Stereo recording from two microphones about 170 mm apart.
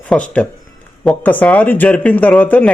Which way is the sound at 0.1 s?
5° left (ahead or behind).